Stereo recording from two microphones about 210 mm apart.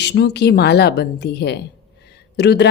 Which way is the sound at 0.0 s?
50° left (ahead or behind).